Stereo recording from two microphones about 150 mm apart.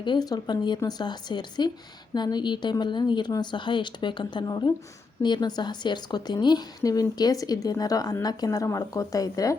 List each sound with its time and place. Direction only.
0.0 s a woman's voice: 30° left (ahead or behind)